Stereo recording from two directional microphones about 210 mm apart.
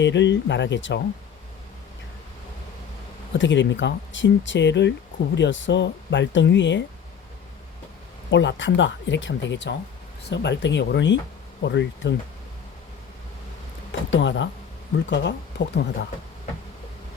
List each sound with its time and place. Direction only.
0.0 s speech: 60° left (ahead or behind)
3.3 s speech: 60° left (ahead or behind)
8.3 s speech: 60° left (ahead or behind)
14.1 s speech: 60° left (ahead or behind)